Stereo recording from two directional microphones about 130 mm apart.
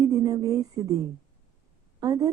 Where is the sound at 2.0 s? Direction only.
30° right (ahead or behind).